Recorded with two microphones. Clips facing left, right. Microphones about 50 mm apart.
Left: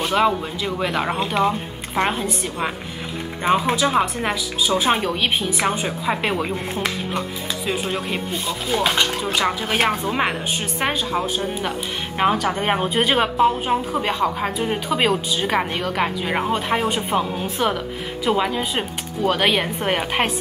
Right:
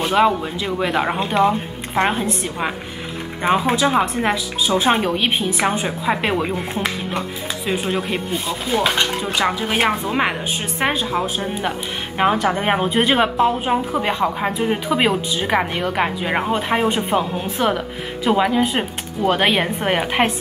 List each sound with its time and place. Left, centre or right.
0.0 s a woman's voice: centre
9.8 s a woman's voice: right
10.1 s a woman's voice: centre